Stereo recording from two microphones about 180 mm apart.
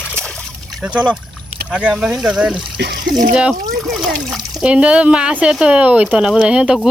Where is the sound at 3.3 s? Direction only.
5° right (ahead or behind).